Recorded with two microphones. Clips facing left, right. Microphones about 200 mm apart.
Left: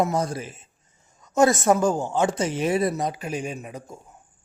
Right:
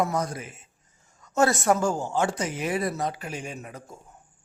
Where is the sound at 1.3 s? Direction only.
15° left (ahead or behind).